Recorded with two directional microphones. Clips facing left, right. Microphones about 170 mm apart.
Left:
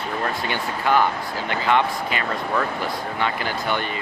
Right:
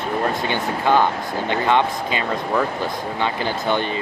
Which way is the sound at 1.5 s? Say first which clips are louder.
Right 2 dB; 20° right (ahead or behind).